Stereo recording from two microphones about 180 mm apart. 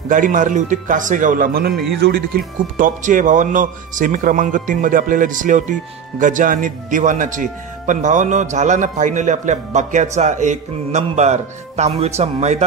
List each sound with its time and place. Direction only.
0.1 s a man's voice: 45° right (ahead or behind); by 2.4 s 65° right (ahead or behind)
2.8 s a man's voice: 45° right (ahead or behind)